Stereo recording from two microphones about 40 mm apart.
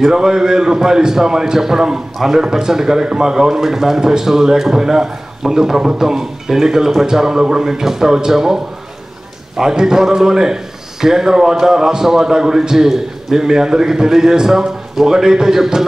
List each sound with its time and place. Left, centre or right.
0.0 s a man's voice: centre
9.6 s a man's voice: centre